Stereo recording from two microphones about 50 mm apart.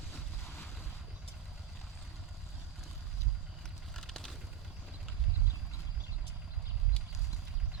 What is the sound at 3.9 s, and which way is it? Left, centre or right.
Vehicle, centre.